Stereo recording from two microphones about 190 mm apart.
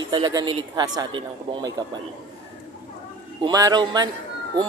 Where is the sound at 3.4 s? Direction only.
20° right (ahead or behind).